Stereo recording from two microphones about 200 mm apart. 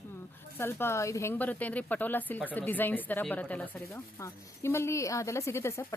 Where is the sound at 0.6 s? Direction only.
10° left (ahead or behind).